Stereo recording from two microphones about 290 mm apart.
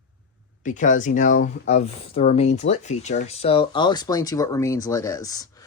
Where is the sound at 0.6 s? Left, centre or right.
Left.